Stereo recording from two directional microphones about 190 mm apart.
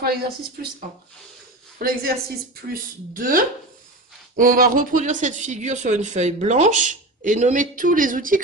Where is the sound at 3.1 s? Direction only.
45° right (ahead or behind).